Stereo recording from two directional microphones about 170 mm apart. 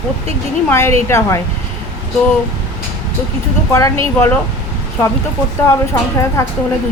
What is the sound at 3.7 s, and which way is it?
Speech, 20° left (ahead or behind).